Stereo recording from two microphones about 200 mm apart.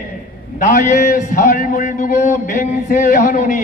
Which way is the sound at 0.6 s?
40° left (ahead or behind).